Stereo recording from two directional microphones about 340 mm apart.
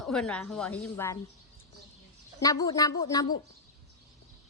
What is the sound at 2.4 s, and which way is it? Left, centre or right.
Speech, centre.